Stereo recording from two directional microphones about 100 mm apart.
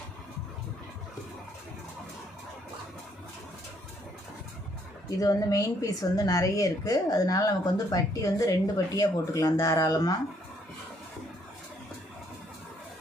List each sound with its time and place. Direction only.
5.0 s a woman's voice: 35° left (ahead or behind)